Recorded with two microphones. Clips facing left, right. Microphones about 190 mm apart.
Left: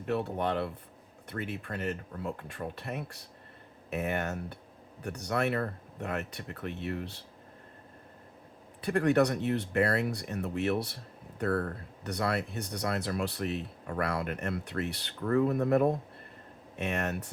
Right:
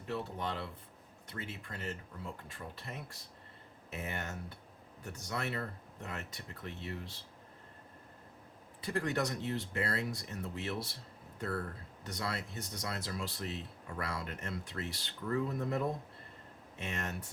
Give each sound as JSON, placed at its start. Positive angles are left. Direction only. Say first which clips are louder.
{"t": 0.0, "sound": "speech", "louder": "left 8 dB", "side_deg": 60}
{"t": 8.8, "sound": "speech", "louder": "left 9 dB", "side_deg": 65}